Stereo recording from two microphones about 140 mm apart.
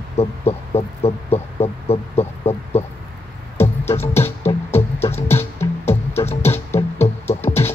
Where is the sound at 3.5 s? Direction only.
15° left (ahead or behind).